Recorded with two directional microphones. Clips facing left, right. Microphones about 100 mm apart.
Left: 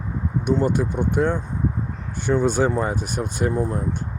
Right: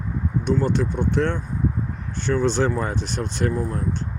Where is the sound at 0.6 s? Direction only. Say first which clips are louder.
Left 1 dB; 10° left (ahead or behind).